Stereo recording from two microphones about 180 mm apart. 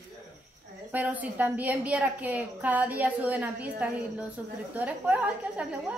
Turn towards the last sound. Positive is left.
turn(degrees=-5)  # may be behind; listen again after turning